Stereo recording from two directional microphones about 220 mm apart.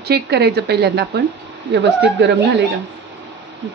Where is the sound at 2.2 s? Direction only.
50° right (ahead or behind).